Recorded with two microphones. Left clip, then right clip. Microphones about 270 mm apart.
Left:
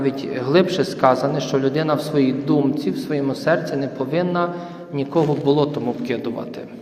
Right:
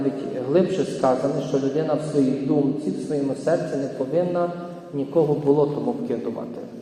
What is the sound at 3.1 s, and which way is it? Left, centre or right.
A man's voice, left.